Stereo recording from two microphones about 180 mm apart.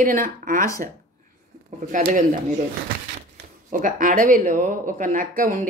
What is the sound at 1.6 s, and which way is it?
Speech, 45° right (ahead or behind).